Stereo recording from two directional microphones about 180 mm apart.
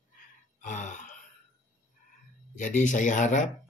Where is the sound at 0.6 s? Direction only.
45° left (ahead or behind).